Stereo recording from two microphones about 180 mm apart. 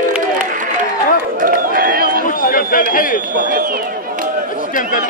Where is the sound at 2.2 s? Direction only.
50° left (ahead or behind).